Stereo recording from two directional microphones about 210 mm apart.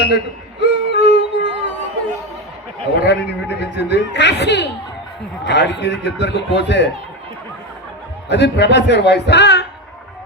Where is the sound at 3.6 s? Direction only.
55° left (ahead or behind).